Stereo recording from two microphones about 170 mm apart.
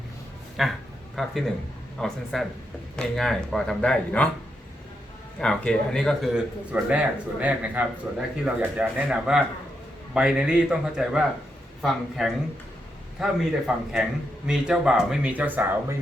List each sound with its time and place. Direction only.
0.6 s a man's voice: centre (ahead or behind)
5.4 s a man's voice: 5° left (ahead or behind)